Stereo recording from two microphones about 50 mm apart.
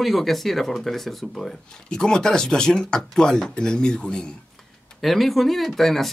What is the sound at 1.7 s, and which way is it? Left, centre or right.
Speech, centre.